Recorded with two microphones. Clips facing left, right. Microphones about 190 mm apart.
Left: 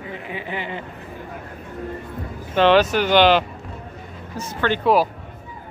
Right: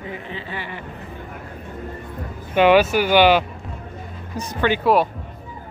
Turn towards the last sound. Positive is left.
turn(degrees=0)  # may be behind; listen again after turning